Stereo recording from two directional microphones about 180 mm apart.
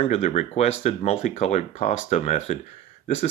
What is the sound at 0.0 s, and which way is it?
Speech, 35° left (ahead or behind).